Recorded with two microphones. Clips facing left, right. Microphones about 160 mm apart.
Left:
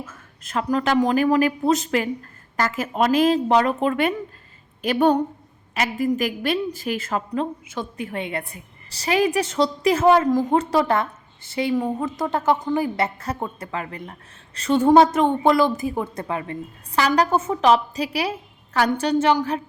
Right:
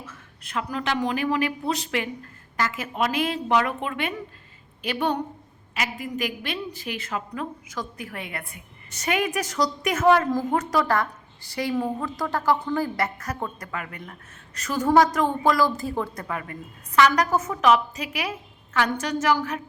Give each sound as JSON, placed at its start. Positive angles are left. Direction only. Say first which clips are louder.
{"t": 0.0, "sound": "a woman's voice", "louder": "left 5 dB", "side_deg": 45}
{"t": 7.3, "sound": "a woman's voice", "louder": "left 6 dB", "side_deg": 25}
{"t": 13.1, "sound": "a woman's voice", "louder": "left 3 dB", "side_deg": 25}